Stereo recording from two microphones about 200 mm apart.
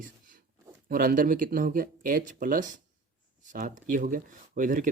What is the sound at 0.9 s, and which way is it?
Speech, 45° right (ahead or behind).